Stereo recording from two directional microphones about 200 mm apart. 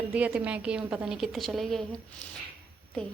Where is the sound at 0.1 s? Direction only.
5° right (ahead or behind).